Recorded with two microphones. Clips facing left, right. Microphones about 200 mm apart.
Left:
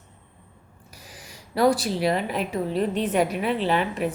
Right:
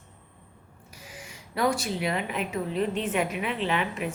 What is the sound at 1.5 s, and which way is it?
A woman's voice, 35° left (ahead or behind).